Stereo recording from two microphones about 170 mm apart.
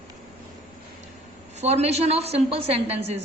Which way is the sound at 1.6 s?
40° right (ahead or behind).